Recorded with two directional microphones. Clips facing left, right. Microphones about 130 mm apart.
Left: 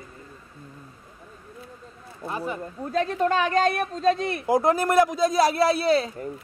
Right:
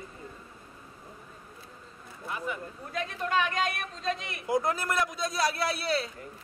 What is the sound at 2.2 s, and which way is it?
Speech, 35° left (ahead or behind).